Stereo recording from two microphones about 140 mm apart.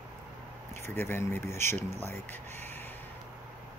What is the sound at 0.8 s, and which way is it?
Speech, 20° left (ahead or behind).